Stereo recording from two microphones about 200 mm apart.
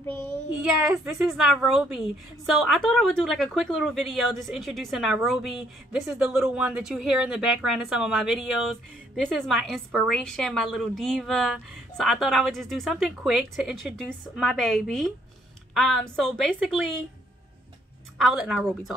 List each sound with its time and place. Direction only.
0.6 s speech: 5° right (ahead or behind)
18.1 s speech: centre (ahead or behind)